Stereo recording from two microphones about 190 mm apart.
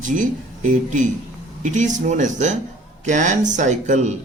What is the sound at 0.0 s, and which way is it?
Speech, 45° right (ahead or behind).